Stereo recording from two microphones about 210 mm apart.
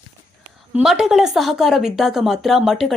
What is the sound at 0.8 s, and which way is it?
Speech, centre (ahead or behind).